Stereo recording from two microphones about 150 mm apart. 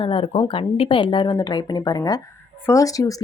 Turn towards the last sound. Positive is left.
turn(degrees=25)  # may be behind; listen again after turning